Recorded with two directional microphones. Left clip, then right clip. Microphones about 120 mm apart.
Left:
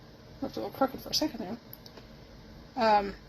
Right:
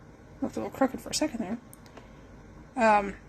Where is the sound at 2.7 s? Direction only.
30° right (ahead or behind).